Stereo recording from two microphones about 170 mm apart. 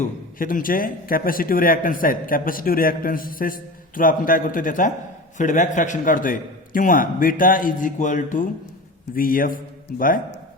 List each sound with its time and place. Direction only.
0.0 s a man's voice: 55° left (ahead or behind)